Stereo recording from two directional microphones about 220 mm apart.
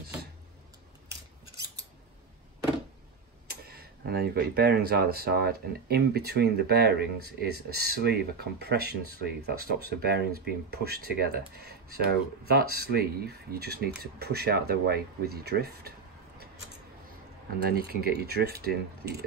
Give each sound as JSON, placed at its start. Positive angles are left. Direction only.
{"t": 3.4, "sound": "speech", "side_deg": -45}
{"t": 17.6, "sound": "speech", "side_deg": -45}